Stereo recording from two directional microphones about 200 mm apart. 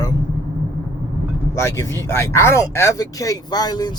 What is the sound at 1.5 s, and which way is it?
Speech, 15° left (ahead or behind).